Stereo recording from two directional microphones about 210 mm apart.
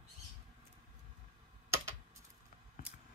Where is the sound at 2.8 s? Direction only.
45° left (ahead or behind).